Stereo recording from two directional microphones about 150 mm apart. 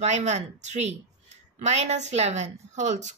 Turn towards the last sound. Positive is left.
turn(degrees=-50)  # may be behind; listen again after turning